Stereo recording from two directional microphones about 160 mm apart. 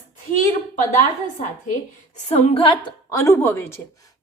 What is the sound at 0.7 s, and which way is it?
A woman's voice, 55° left (ahead or behind).